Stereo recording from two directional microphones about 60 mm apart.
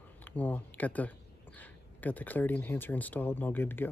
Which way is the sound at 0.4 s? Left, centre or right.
Left.